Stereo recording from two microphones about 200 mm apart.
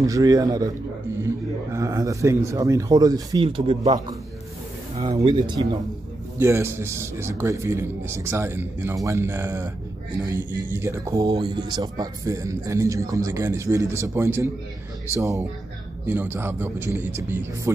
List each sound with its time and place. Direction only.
0.0 s a man's voice: 20° right (ahead or behind)
5.2 s a man's voice: 20° right (ahead or behind)
10.7 s speech: 10° right (ahead or behind)